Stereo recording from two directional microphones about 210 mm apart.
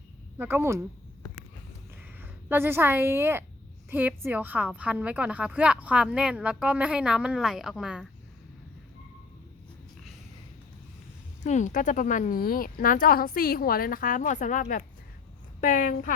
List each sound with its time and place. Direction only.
0.3 s speech: 10° right (ahead or behind)
2.2 s a woman's voice: 10° right (ahead or behind)
11.4 s a woman's voice: 35° left (ahead or behind)